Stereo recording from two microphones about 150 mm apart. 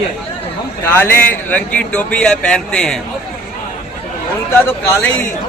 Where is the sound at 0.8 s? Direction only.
15° left (ahead or behind).